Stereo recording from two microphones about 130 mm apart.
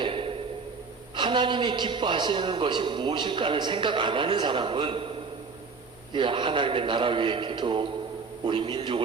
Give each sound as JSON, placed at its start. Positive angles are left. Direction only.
{"t": 0.0, "sound": "a sound", "side_deg": -45}
{"t": 1.1, "sound": "a man's voice", "side_deg": -35}
{"t": 6.1, "sound": "a man's voice", "side_deg": -40}